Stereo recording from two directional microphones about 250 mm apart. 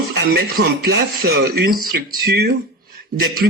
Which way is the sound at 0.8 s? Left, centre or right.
Right.